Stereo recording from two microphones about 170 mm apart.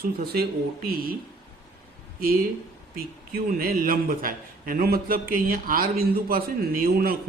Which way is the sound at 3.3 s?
60° right (ahead or behind).